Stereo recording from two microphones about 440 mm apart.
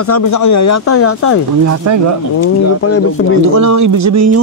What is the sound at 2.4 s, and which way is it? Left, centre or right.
Speech, left.